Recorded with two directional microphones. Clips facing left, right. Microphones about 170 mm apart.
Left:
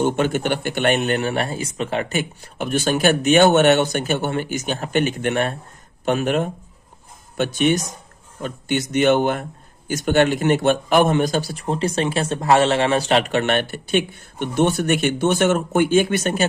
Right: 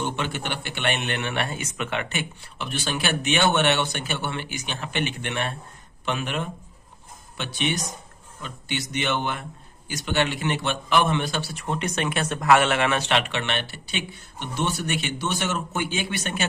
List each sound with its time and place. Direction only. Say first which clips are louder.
0.0 s a man's voice: left 9 dB; 45° left (ahead or behind)